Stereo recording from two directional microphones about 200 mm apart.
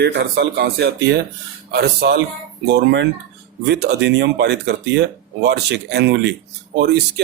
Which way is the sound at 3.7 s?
55° right (ahead or behind).